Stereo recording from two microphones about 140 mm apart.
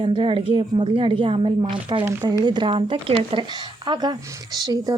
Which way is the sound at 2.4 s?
35° right (ahead or behind).